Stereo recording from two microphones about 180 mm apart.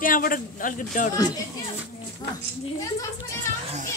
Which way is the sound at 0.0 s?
50° left (ahead or behind).